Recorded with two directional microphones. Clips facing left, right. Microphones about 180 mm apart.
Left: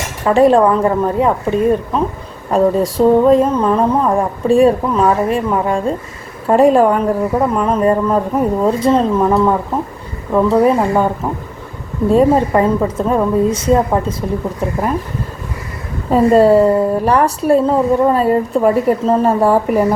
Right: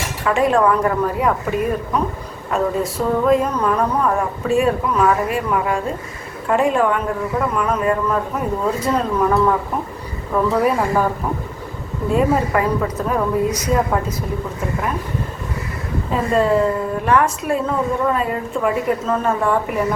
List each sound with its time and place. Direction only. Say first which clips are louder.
0.3 s a woman's voice: left 6 dB; 35° left (ahead or behind)
10.6 s speech: left 5 dB; 25° left (ahead or behind)
12.1 s speech: left 6 dB; 25° left (ahead or behind)
16.0 s a woman's voice: left 8 dB; 40° left (ahead or behind)